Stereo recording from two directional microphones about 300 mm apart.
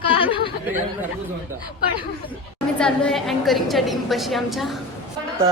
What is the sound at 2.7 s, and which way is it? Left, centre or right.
A woman's voice, centre.